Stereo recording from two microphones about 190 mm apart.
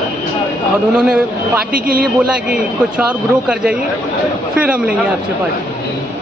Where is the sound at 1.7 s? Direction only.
50° right (ahead or behind).